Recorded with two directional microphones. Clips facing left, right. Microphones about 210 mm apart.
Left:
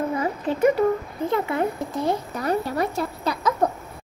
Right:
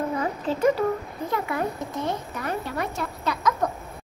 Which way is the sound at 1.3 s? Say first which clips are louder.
Left 3 dB; 25° left (ahead or behind).